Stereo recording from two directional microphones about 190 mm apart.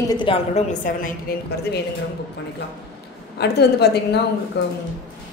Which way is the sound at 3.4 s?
60° left (ahead or behind).